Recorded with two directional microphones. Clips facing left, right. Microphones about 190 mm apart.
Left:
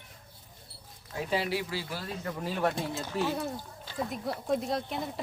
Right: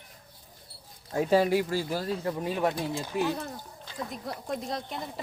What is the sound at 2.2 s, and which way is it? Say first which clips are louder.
Speech: left 1 dB; 20° right (ahead or behind).